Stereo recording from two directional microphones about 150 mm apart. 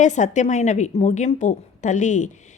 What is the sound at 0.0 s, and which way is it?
Speech, 55° left (ahead or behind).